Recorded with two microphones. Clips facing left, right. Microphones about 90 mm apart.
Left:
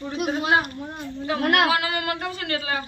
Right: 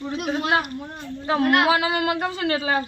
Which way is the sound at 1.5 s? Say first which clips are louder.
Even; 20° right (ahead or behind).